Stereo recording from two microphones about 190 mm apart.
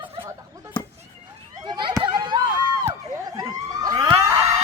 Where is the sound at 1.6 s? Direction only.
25° right (ahead or behind).